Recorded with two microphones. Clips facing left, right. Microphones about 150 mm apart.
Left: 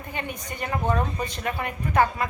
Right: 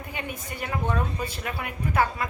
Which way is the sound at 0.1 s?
5° right (ahead or behind).